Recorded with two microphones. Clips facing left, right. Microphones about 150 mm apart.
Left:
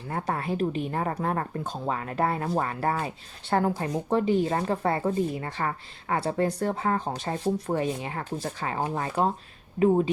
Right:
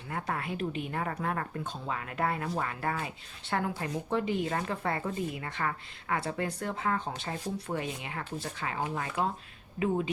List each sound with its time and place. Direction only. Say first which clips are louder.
0.1 s speech: left 5 dB; 35° left (ahead or behind)